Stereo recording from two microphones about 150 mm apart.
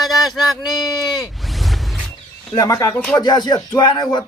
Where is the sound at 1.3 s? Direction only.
Centre (ahead or behind).